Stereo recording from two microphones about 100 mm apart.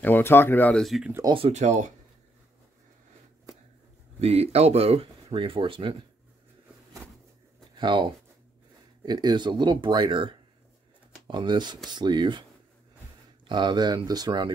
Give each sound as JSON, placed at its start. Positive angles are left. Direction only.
{"t": 0.0, "sound": "speech", "side_deg": 20}
{"t": 0.7, "sound": "speech", "side_deg": 0}
{"t": 1.2, "sound": "speech", "side_deg": -40}
{"t": 4.2, "sound": "speech", "side_deg": -90}
{"t": 7.7, "sound": "speech", "side_deg": -50}
{"t": 13.5, "sound": "speech", "side_deg": -50}